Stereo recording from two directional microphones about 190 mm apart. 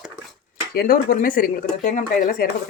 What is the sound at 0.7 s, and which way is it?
Speech, 50° left (ahead or behind).